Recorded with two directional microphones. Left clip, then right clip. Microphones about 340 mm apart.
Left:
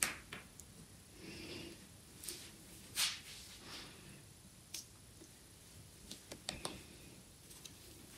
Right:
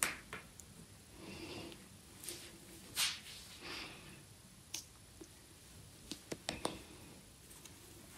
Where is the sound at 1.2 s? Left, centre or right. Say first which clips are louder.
Right 1 dB; centre.